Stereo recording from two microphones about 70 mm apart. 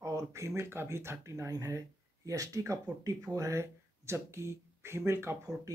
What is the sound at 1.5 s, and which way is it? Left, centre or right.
Speech, right.